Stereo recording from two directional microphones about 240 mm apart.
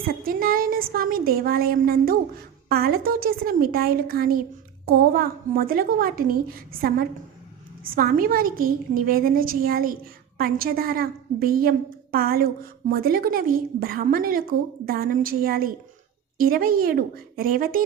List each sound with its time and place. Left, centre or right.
0.0 s a woman's voice: right